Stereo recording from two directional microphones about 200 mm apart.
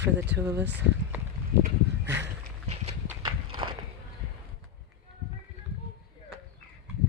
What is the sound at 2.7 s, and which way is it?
Clip-clop, 35° right (ahead or behind).